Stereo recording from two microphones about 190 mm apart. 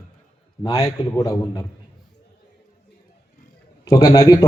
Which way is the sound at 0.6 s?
20° left (ahead or behind).